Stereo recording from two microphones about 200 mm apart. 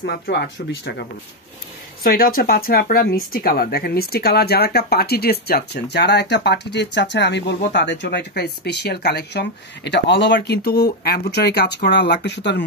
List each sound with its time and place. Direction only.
0.0 s speech: 55° left (ahead or behind)
2.0 s speech: 45° left (ahead or behind)